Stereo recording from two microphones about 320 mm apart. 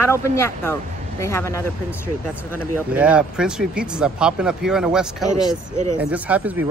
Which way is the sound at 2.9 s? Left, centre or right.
Centre.